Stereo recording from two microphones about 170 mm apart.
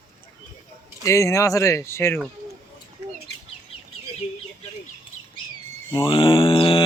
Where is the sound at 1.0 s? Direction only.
15° left (ahead or behind).